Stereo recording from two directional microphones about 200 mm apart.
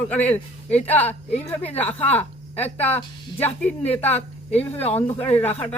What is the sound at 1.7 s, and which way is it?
Speech, 10° left (ahead or behind).